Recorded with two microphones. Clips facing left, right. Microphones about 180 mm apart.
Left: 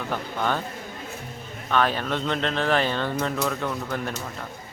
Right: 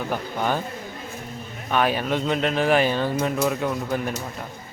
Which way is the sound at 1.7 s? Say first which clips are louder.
Right 2 dB; 10° right (ahead or behind).